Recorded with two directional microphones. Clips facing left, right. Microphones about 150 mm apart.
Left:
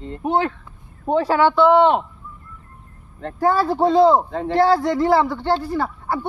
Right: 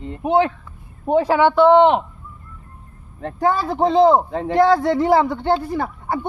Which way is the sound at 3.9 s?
20° right (ahead or behind).